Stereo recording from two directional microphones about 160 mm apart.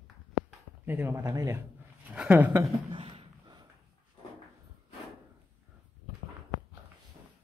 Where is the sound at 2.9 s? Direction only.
35° right (ahead or behind).